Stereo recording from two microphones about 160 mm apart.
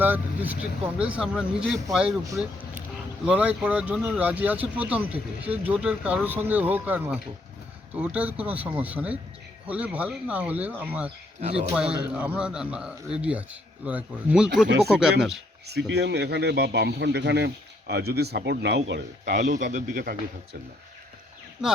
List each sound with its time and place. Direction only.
0.0 s speech: 10° right (ahead or behind)
3.2 s a man's voice: 10° right (ahead or behind)
15.9 s a man's voice: 90° right
19.4 s speech: 55° right (ahead or behind)
21.6 s a man's voice: 5° right (ahead or behind)